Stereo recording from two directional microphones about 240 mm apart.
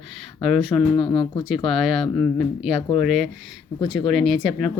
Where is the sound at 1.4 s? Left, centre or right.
Centre.